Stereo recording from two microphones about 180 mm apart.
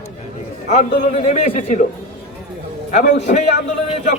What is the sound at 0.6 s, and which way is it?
A man's voice, 45° left (ahead or behind).